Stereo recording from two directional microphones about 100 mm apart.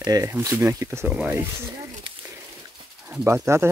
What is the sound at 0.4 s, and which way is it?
Speech, 30° right (ahead or behind).